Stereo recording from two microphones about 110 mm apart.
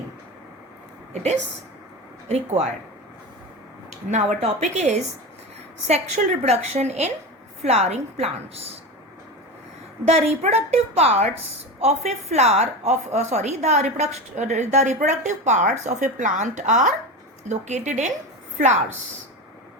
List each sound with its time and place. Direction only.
1.1 s a woman's voice: 80° right
4.1 s speech: 90° right
5.9 s a woman's voice: 75° right (ahead or behind)
7.6 s a woman's voice: 75° right (ahead or behind)
10.1 s a woman's voice: 70° right (ahead or behind); by 18.9 s 90° right